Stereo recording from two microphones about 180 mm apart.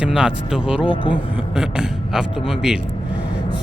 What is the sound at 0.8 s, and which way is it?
Speech, 30° left (ahead or behind).